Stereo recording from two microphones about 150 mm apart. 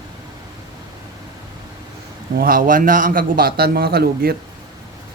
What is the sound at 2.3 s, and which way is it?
A man's voice, 70° right (ahead or behind).